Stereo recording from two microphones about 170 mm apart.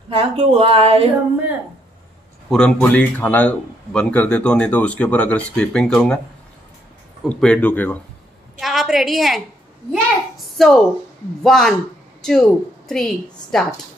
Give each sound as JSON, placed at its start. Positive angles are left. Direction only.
{"t": 0.1, "sound": "speech", "side_deg": -35}
{"t": 2.5, "sound": "a man's voice", "side_deg": 10}
{"t": 7.2, "sound": "a man's voice", "side_deg": 5}
{"t": 9.9, "sound": "a sound", "side_deg": 0}
{"t": 11.4, "sound": "a woman's voice", "side_deg": 0}